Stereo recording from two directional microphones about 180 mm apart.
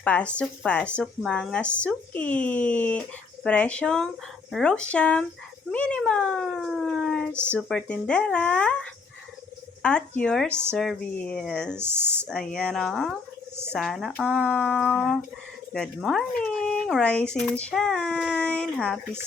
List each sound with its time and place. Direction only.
0.0 s speech: 5° left (ahead or behind)